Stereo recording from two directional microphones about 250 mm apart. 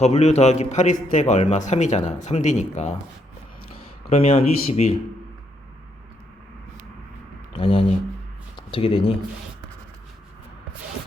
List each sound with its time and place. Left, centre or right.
0.0 s a man's voice: left
4.1 s a man's voice: left
7.5 s speech: left